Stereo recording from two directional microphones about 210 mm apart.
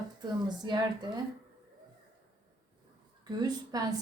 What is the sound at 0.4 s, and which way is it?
Speech, 20° right (ahead or behind).